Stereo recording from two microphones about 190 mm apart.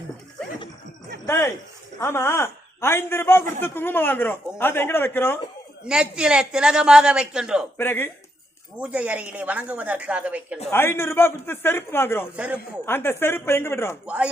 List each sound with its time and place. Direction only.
2.0 s speech: 15° left (ahead or behind)
5.9 s a man's voice: 5° right (ahead or behind)
7.8 s speech: 10° left (ahead or behind)
8.8 s a woman's voice: 5° right (ahead or behind)
10.7 s speech: 10° left (ahead or behind)